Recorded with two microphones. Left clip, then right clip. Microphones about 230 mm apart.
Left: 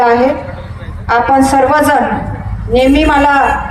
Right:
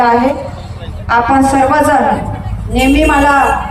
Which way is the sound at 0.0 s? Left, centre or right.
Left.